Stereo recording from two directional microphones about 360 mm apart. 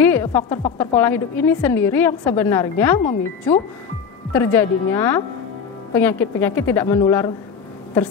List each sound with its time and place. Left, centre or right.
0.0 s music: centre
0.4 s a woman's voice: centre
0.7 s a woman's voice: centre
3.0 s speech: centre
4.3 s a woman's voice: centre